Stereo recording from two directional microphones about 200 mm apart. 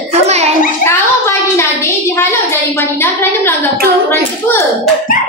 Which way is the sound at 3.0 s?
10° left (ahead or behind).